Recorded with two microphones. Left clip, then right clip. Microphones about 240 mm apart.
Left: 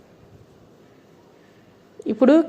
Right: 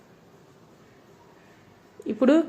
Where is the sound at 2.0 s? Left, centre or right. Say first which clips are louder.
Left 5 dB; centre.